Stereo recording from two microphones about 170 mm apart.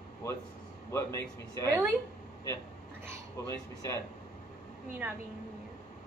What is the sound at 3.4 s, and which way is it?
Speech, 15° left (ahead or behind).